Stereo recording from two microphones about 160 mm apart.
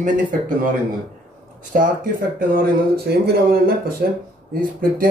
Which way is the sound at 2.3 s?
65° right (ahead or behind).